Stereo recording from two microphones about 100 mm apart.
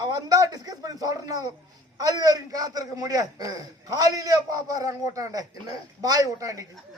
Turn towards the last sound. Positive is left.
turn(degrees=-35)  # may be behind; listen again after turning